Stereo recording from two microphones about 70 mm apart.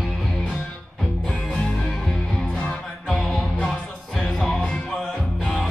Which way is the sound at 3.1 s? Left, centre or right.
Centre.